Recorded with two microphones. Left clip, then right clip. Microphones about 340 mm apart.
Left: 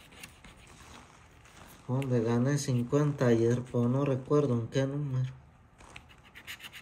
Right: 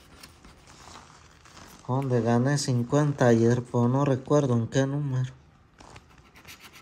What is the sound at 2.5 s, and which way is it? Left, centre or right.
Speech, centre.